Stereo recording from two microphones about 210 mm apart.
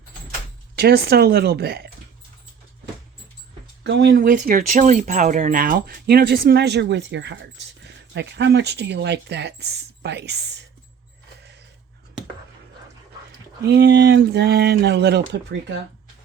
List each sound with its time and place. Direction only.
0.8 s speech: 50° right (ahead or behind)
3.8 s speech: 55° right (ahead or behind)
13.6 s speech: 50° right (ahead or behind)